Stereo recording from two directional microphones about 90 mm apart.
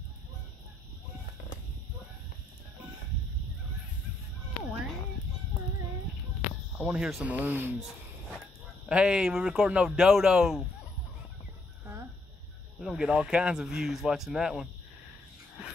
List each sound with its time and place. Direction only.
6.8 s speech: 10° right (ahead or behind)
8.8 s speech: 10° right (ahead or behind)
11.8 s a sound: 30° right (ahead or behind)
12.8 s speech: 5° right (ahead or behind)